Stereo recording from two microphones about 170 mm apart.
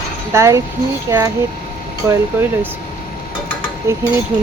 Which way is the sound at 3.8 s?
15° right (ahead or behind).